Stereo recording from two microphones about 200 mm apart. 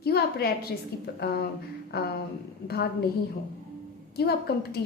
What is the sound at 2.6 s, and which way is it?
Speech, 50° left (ahead or behind).